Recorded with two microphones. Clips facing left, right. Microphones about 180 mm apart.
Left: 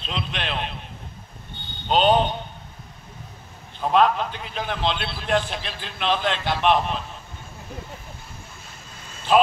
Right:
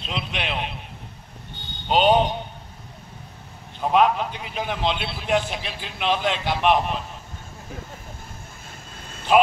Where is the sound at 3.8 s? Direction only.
10° right (ahead or behind).